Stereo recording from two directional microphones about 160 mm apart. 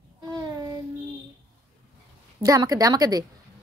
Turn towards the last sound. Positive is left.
turn(degrees=-20)  # may be behind; listen again after turning